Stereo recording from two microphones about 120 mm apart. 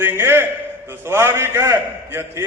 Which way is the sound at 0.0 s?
20° right (ahead or behind).